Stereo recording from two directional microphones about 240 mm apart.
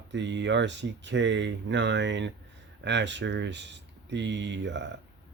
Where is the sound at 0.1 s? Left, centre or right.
Right.